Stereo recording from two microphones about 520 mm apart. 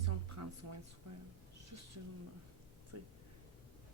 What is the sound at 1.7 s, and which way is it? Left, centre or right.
A woman's voice, right.